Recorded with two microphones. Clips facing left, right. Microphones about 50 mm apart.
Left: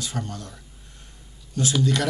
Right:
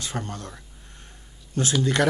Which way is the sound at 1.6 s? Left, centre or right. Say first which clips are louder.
Even; right.